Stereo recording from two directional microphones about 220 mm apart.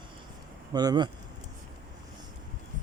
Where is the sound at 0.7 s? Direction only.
15° right (ahead or behind).